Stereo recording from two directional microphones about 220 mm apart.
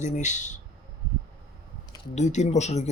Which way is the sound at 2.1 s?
30° left (ahead or behind).